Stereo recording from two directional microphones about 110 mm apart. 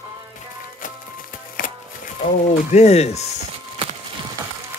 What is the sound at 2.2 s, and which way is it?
Speech, 85° left.